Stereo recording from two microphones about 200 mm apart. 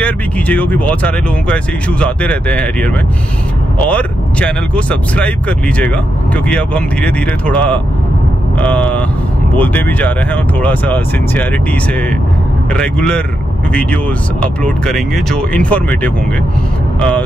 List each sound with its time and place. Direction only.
0.0 s speech: 5° left (ahead or behind)
12.7 s speech: 5° left (ahead or behind)
14.4 s speech: 5° left (ahead or behind)